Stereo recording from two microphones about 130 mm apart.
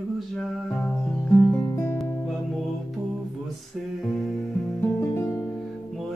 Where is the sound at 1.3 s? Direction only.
30° left (ahead or behind).